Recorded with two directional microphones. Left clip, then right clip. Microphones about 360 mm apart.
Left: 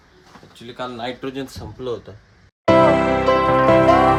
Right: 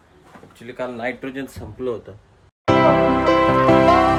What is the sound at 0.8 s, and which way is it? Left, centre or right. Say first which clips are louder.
Speech: right 1 dB; centre.